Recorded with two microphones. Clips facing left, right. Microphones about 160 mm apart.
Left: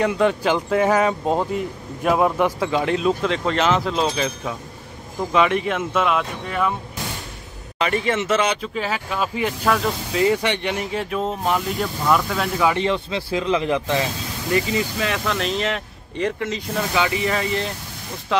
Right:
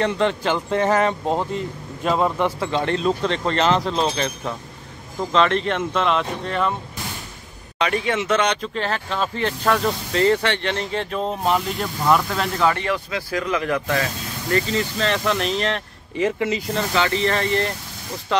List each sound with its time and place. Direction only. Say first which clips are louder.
0.0 s speech: left 2 dB; 10° left (ahead or behind)
7.8 s speech: left 1 dB; centre (ahead or behind)
12.7 s speech: left 3 dB; 25° left (ahead or behind)
15.2 s speech: right 1 dB; centre (ahead or behind)
16.9 s speech: right 1 dB; 10° left (ahead or behind)